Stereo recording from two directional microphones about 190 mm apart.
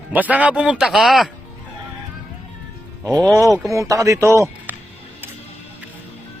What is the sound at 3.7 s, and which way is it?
A man's voice, 15° right (ahead or behind).